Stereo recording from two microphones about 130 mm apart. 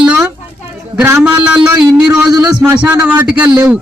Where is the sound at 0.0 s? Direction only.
5° right (ahead or behind).